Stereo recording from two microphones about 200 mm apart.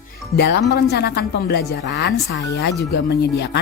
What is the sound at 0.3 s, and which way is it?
A woman's voice, 60° left (ahead or behind).